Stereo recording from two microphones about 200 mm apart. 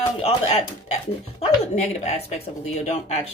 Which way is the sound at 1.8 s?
35° left (ahead or behind).